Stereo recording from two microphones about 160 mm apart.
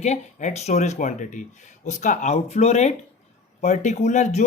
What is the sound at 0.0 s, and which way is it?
Speech, 45° left (ahead or behind).